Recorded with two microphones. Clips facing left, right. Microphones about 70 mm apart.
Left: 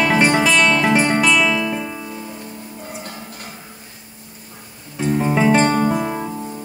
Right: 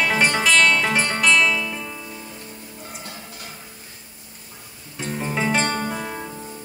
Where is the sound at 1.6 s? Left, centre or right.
Left.